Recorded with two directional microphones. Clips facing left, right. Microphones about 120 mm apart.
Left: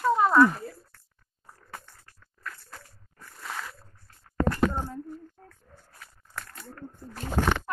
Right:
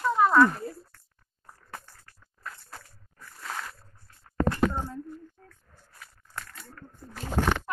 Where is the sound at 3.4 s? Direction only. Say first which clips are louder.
Even; centre (ahead or behind).